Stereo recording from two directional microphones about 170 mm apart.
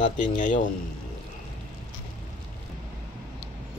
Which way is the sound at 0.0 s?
45° left (ahead or behind).